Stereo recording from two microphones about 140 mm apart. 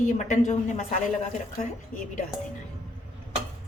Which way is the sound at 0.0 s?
55° left (ahead or behind).